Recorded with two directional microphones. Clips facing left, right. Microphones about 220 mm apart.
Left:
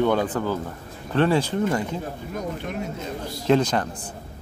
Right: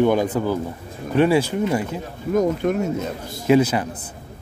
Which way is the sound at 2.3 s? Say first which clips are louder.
Right 13 dB; 45° right (ahead or behind).